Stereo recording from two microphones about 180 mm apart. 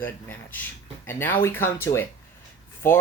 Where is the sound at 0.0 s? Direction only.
10° left (ahead or behind).